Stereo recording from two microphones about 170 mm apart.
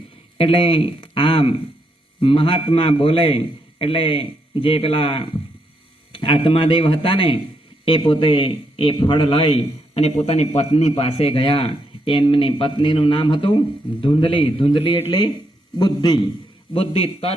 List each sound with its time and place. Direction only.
0.3 s a man's voice: 30° left (ahead or behind)